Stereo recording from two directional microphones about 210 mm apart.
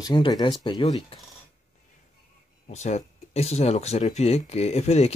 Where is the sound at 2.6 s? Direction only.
35° left (ahead or behind).